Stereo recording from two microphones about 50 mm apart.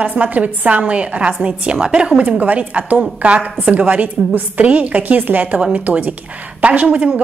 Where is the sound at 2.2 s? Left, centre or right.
Right.